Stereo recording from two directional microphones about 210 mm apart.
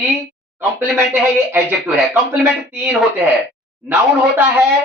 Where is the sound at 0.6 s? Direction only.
5° right (ahead or behind).